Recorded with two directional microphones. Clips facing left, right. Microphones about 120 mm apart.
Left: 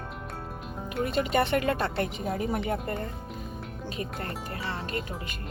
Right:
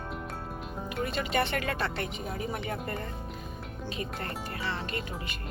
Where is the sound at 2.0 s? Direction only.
55° left (ahead or behind).